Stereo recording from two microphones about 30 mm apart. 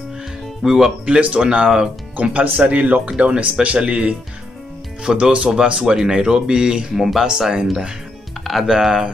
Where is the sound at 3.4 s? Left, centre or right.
Right.